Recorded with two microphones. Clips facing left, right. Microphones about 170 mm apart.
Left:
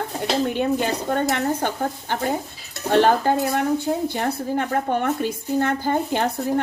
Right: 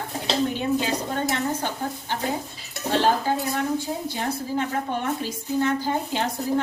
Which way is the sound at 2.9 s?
60° left (ahead or behind).